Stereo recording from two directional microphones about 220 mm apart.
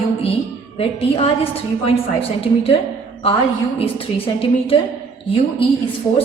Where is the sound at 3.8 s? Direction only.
25° left (ahead or behind).